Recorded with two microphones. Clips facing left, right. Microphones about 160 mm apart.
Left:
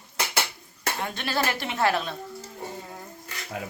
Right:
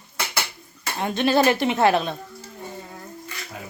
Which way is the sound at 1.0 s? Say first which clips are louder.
Right 10 dB; 20° right (ahead or behind).